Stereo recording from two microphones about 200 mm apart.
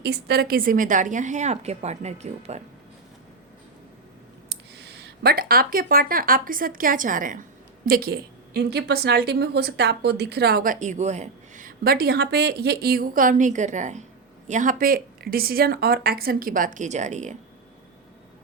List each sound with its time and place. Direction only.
0.0 s a woman's voice: 55° right (ahead or behind); by 2.6 s 35° right (ahead or behind)
4.4 s a woman's voice: 55° right (ahead or behind); by 17.3 s 35° right (ahead or behind)